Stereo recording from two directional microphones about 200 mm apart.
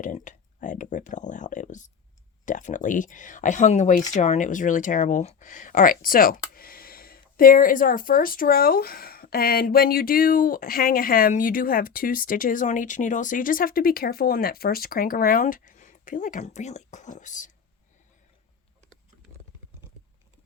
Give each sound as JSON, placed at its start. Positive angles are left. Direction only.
{"t": 0.0, "sound": "speech", "side_deg": 40}